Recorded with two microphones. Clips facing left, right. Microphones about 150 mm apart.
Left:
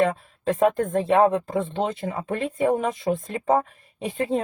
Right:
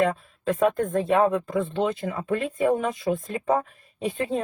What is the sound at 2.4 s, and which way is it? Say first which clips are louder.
Speech: left 2 dB; 25° left (ahead or behind).